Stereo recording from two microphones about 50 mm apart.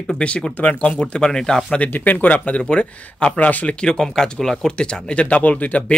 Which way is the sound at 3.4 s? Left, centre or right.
Left.